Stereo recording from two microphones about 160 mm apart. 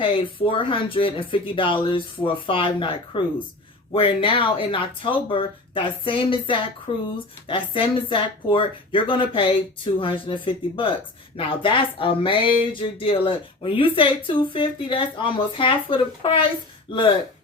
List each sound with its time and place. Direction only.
0.0 s speech: 35° left (ahead or behind)